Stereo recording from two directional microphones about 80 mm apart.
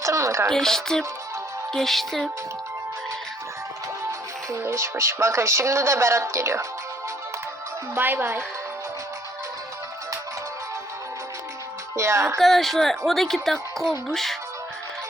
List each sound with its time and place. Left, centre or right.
0.0 s speech: right
0.5 s speech: centre
4.6 s speech: right
7.9 s speech: right
11.9 s speech: right
12.4 s speech: centre